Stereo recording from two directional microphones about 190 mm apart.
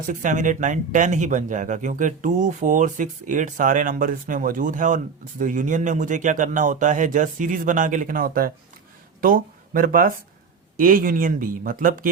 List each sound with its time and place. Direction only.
0.1 s speech: 45° right (ahead or behind)